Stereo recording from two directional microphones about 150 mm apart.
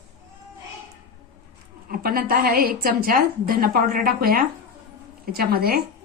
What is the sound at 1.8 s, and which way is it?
A woman's voice, 75° right (ahead or behind).